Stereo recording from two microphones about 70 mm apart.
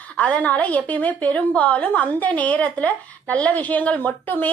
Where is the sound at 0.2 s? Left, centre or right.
Centre.